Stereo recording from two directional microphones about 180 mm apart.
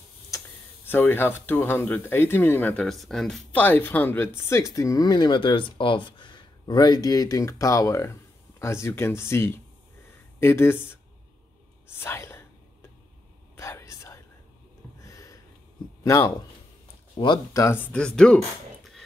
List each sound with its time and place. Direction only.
0.8 s speech: 10° left (ahead or behind)
13.6 s whispering: 15° left (ahead or behind)
15.0 s a sound: 20° left (ahead or behind)
16.0 s speech: 20° left (ahead or behind)
17.6 s speech: 10° left (ahead or behind)